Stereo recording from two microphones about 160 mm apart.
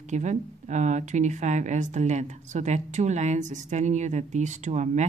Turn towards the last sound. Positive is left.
turn(degrees=-50)  # may be behind; listen again after turning